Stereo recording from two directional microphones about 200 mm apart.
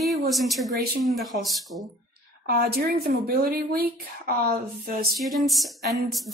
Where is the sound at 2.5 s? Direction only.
50° right (ahead or behind).